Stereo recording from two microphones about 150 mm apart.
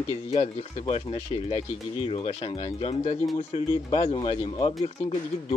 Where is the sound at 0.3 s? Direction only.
50° left (ahead or behind).